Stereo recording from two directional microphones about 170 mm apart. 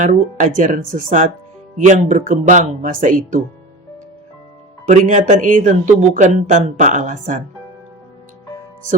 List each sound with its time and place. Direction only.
0.0 s speech: 50° right (ahead or behind)
4.9 s speech: 45° right (ahead or behind)